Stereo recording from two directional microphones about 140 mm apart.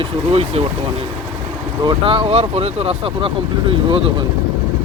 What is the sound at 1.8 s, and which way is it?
Speech, 35° right (ahead or behind).